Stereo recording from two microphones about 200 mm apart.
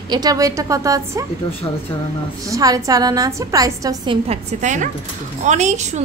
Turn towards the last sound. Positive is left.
turn(degrees=-35)  # may be behind; listen again after turning